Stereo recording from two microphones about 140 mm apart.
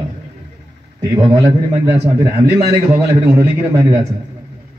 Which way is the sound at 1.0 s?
25° right (ahead or behind).